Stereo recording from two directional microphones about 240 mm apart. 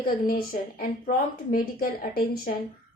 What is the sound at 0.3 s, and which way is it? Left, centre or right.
A woman's voice, left.